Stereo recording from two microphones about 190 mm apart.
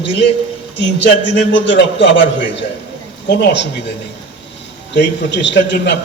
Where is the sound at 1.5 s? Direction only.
70° left (ahead or behind).